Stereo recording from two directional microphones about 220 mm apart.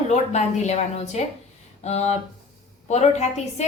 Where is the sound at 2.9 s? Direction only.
30° left (ahead or behind).